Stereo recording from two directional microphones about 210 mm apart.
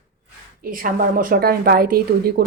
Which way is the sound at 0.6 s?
40° right (ahead or behind).